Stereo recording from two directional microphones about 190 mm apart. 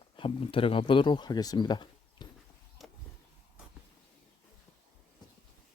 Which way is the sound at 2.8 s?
Centre (ahead or behind).